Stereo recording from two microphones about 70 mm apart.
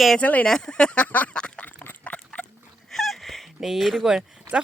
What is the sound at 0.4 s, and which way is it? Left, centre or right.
Speech, centre.